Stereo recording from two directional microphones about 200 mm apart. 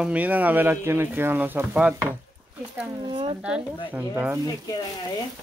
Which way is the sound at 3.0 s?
25° right (ahead or behind).